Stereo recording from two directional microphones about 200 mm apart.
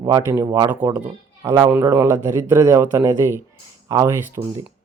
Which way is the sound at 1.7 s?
15° right (ahead or behind).